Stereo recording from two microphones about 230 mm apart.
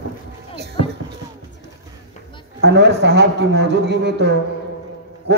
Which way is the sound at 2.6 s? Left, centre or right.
Right.